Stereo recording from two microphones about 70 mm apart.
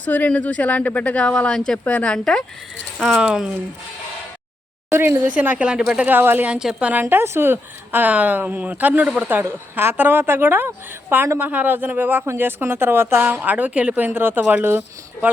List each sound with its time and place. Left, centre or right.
0.0 s speech: left
1.8 s speech: left
2.1 s speech: centre
3.2 s a woman's voice: centre
4.9 s a woman's voice: right; by 6.1 s centre
6.1 s a woman's voice: right
6.5 s a woman's voice: centre
6.9 s a woman's voice: right